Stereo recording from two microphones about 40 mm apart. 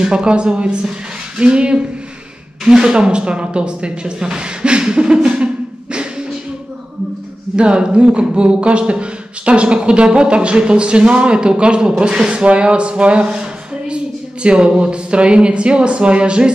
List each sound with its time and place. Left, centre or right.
0.0 s a man's voice: right
7.5 s a man's voice: right